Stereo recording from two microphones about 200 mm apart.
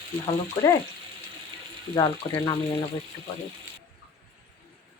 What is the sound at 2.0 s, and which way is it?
Speech, 20° left (ahead or behind).